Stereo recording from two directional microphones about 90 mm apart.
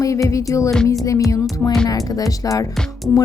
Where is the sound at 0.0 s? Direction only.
35° left (ahead or behind).